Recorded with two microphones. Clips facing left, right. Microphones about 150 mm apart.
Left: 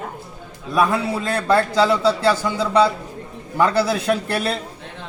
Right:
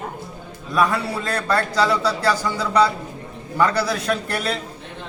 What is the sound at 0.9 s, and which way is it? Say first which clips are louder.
A man's voice: left 3 dB; 25° left (ahead or behind).